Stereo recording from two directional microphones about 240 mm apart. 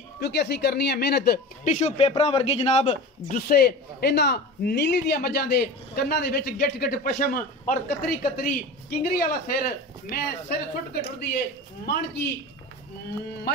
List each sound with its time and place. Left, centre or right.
0.2 s speech: left